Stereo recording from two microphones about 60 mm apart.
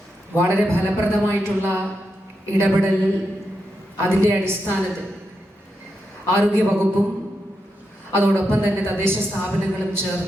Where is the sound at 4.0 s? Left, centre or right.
Right.